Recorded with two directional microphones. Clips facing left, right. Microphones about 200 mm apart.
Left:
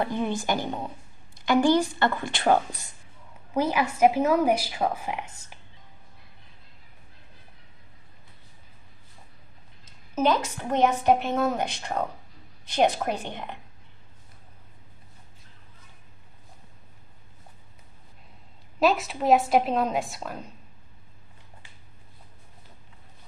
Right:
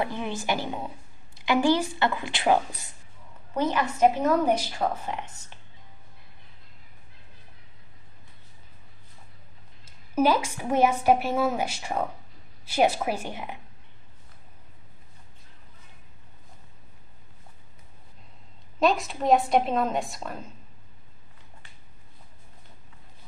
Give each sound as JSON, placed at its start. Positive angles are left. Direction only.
{"t": 0.7, "sound": "a woman's voice", "side_deg": -5}
{"t": 3.5, "sound": "a woman's voice", "side_deg": 10}
{"t": 9.8, "sound": "a woman's voice", "side_deg": -10}
{"t": 18.8, "sound": "a woman's voice", "side_deg": 0}